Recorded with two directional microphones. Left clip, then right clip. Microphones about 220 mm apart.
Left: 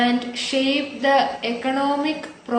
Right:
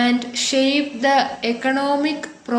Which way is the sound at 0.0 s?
50° right (ahead or behind).